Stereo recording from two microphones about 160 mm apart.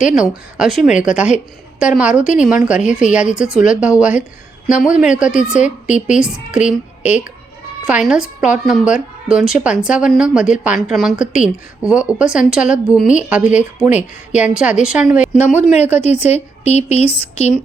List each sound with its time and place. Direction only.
0.2 s a woman's voice: 5° right (ahead or behind)
15.6 s speech: 45° left (ahead or behind)